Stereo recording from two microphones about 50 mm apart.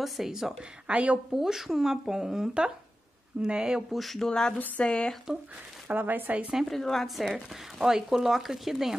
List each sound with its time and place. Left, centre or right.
0.0 s speech: centre
0.8 s a woman's voice: right
1.3 s speech: centre
3.9 s speech: centre
4.3 s speech: centre
4.6 s speech: left
4.8 s speech: centre
5.9 s speech: right
6.5 s speech: centre
7.3 s speech: centre